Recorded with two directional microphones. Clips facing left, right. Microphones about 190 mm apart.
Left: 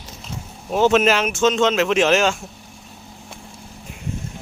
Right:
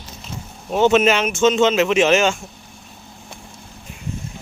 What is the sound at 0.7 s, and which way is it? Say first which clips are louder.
Speech: right 1 dB; centre (ahead or behind).